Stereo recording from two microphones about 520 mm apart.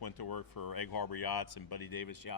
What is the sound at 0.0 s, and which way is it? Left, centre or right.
Speech, left.